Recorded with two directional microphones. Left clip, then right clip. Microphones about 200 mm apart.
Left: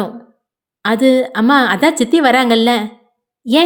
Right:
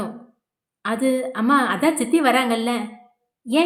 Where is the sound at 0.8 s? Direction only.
40° left (ahead or behind).